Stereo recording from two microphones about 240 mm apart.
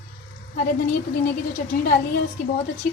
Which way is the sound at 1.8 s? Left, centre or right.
Left.